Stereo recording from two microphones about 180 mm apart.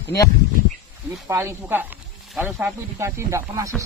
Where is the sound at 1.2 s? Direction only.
15° right (ahead or behind).